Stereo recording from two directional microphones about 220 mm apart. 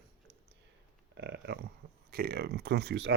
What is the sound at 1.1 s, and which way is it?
Speech, 50° right (ahead or behind).